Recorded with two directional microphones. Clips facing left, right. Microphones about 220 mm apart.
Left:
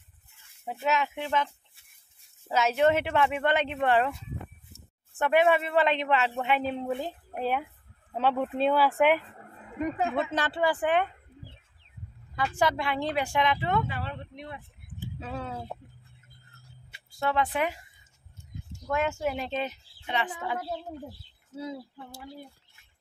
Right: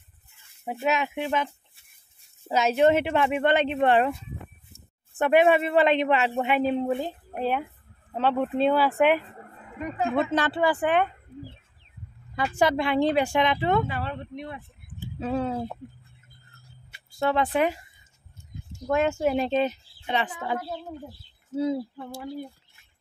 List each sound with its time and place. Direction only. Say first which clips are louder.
0.7 s speech: right 2 dB; 15° right (ahead or behind)
2.5 s speech: right 3 dB; 20° right (ahead or behind)
5.1 s speech: right 4 dB; 20° right (ahead or behind); by 9.2 s 5° left (ahead or behind)
10.1 s speech: right 5 dB; 65° right (ahead or behind)
12.4 s speech: right 4 dB; 20° right (ahead or behind)
13.8 s speech: right 4 dB; 50° right (ahead or behind)
15.1 s speech: right 10 dB; 30° right (ahead or behind)
17.2 s a woman's voice: right 4 dB; 35° right (ahead or behind)
18.9 s a woman's voice: right 5 dB; 25° right (ahead or behind)